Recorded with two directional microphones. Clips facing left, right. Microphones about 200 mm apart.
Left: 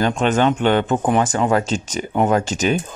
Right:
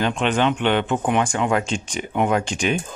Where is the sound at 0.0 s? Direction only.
40° left (ahead or behind).